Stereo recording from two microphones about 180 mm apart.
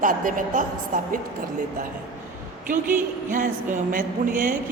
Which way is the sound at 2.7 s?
45° right (ahead or behind).